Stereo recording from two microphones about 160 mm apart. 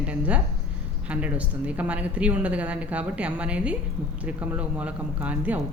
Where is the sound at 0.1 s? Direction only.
10° right (ahead or behind).